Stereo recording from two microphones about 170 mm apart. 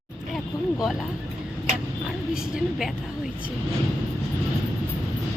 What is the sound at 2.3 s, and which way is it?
Speech, 5° right (ahead or behind).